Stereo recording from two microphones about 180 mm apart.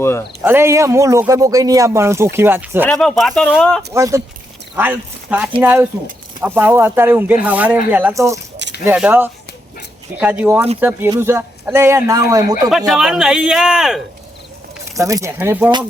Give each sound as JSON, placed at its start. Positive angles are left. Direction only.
{"t": 0.0, "sound": "speech", "side_deg": 15}
{"t": 0.4, "sound": "speech", "side_deg": -15}
{"t": 2.8, "sound": "speech", "side_deg": 5}
{"t": 3.9, "sound": "speech", "side_deg": -15}
{"t": 12.7, "sound": "speech", "side_deg": 0}
{"t": 14.9, "sound": "speech", "side_deg": -15}